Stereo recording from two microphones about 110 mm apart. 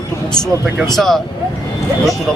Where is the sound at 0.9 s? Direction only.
5° left (ahead or behind).